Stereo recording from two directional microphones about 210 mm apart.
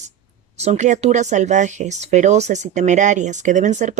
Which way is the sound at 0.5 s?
30° right (ahead or behind).